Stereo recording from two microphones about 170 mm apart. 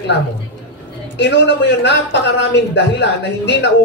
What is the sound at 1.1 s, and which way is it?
A man's voice, 90° left.